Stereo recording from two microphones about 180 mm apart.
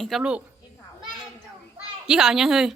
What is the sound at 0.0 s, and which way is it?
Speech, 5° right (ahead or behind).